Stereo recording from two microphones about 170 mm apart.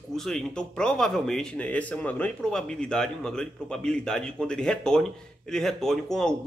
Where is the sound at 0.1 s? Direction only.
Centre (ahead or behind).